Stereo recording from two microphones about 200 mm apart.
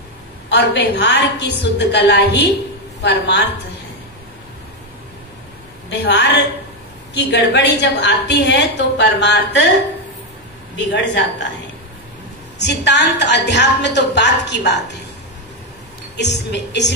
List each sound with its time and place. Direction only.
0.5 s a woman's voice: 55° left (ahead or behind)
5.9 s a woman's voice: 60° left (ahead or behind)
10.9 s a woman's voice: 65° left (ahead or behind)
12.5 s a woman's voice: 60° left (ahead or behind)
16.2 s a woman's voice: 60° left (ahead or behind)